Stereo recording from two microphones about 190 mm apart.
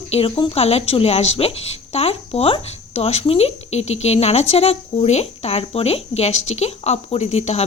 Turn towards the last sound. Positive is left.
turn(degrees=35)  # may be behind; listen again after turning